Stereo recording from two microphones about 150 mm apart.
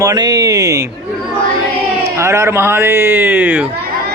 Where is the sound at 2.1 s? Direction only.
20° right (ahead or behind).